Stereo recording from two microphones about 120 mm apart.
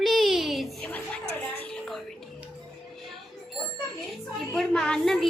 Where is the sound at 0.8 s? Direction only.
15° left (ahead or behind).